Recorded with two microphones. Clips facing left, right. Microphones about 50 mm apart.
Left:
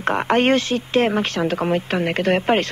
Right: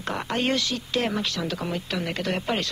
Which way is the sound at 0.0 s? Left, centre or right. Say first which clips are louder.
Left 9 dB; left.